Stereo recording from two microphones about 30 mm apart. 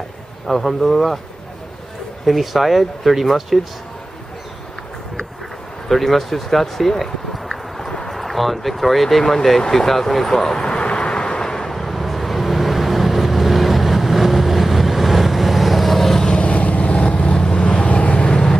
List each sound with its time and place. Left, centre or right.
0.5 s speech: centre
2.2 s speech: centre
5.9 s speech: centre
7.0 s clip-clop: centre
8.1 s speech: centre
10.6 s vehicle: left; by 16.3 s centre
16.4 s vehicle: left
16.8 s vehicle: left
17.8 s vehicle: left
18.1 s vehicle: left